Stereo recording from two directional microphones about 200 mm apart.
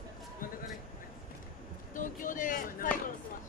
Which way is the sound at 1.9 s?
40° left (ahead or behind).